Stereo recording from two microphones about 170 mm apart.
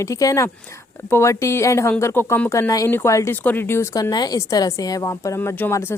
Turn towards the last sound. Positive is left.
turn(degrees=15)  # may be behind; listen again after turning